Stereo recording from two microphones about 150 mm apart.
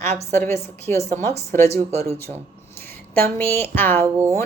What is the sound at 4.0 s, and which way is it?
Speech, 20° right (ahead or behind).